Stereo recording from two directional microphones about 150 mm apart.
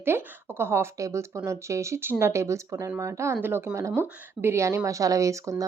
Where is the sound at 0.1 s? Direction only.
15° right (ahead or behind).